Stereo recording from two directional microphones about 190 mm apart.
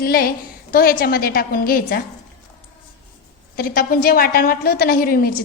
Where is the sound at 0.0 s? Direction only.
50° left (ahead or behind).